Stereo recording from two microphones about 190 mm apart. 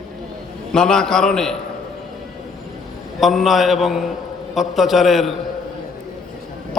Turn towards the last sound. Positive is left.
turn(degrees=0)  # may be behind; listen again after turning